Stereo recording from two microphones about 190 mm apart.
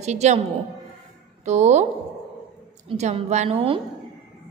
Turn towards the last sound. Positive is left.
turn(degrees=-30)  # may be behind; listen again after turning